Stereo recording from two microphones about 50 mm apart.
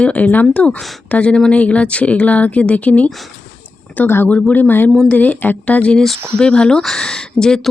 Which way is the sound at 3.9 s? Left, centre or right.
Left.